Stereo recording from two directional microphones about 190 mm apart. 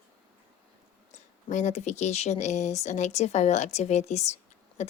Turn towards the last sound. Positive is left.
turn(degrees=35)  # may be behind; listen again after turning